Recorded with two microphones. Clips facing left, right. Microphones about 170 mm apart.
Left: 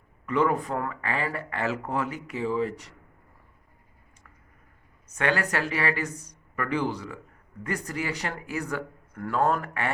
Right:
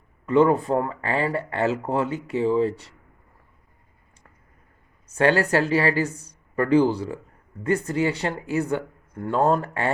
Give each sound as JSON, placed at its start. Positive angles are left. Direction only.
{"t": 0.3, "sound": "speech", "side_deg": -30}
{"t": 5.1, "sound": "speech", "side_deg": -30}